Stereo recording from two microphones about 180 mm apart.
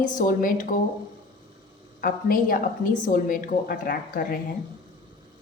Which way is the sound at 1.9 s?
50° left (ahead or behind).